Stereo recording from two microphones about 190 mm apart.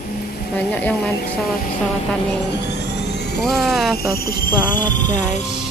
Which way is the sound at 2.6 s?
60° left (ahead or behind).